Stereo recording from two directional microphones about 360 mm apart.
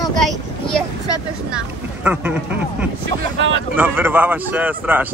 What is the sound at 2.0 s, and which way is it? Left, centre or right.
Speech, centre.